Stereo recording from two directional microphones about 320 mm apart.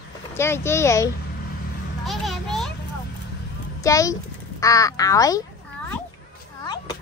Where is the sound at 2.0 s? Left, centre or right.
Centre.